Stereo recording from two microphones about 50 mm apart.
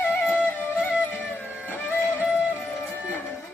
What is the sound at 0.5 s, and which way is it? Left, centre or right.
Music, left.